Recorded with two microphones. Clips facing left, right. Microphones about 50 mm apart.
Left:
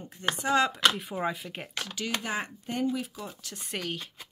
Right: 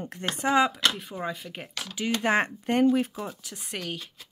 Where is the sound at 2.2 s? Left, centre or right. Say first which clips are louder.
Right 9 dB; right.